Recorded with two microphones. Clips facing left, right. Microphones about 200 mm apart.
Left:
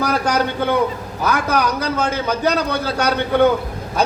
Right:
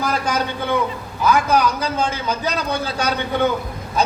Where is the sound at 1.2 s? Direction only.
60° left (ahead or behind).